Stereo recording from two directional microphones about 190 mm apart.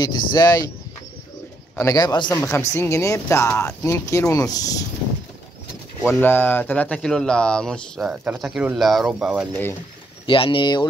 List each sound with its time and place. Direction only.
0.0 s speech: 20° left (ahead or behind)
1.8 s speech: 20° left (ahead or behind)
6.0 s speech: 10° left (ahead or behind)
8.1 s speech: 10° right (ahead or behind)
9.5 s speech: 10° left (ahead or behind)
10.2 s speech: 25° left (ahead or behind)